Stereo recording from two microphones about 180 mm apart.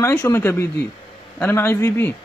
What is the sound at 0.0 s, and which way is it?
Speech, 15° left (ahead or behind).